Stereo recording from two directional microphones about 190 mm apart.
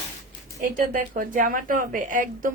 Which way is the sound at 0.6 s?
45° right (ahead or behind).